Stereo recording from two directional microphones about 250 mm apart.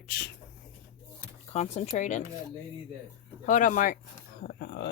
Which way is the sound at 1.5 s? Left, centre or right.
Left.